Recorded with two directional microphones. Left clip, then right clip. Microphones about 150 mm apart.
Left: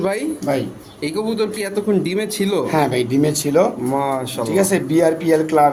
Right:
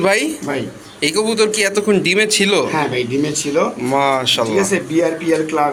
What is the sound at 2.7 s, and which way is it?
Speech, 90° left.